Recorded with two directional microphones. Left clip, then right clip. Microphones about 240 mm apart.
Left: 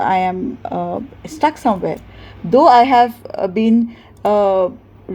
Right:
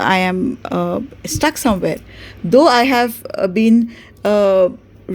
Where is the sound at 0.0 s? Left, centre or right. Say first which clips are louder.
Right 1 dB; right.